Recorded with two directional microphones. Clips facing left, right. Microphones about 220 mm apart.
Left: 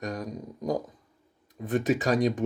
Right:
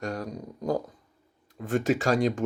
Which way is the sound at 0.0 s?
15° left (ahead or behind).